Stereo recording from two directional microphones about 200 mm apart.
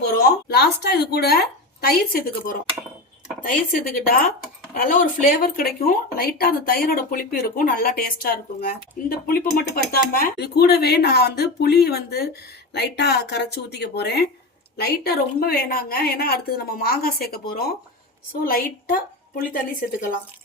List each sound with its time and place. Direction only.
0.2 s a woman's voice: 55° left (ahead or behind)